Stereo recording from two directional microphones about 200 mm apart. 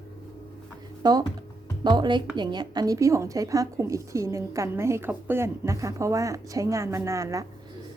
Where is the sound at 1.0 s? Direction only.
20° right (ahead or behind).